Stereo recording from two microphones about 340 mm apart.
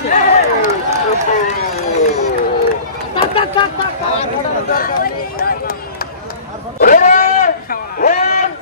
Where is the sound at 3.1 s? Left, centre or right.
Centre.